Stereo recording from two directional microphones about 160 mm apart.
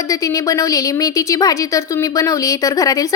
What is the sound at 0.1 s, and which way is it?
A woman's voice, 20° left (ahead or behind).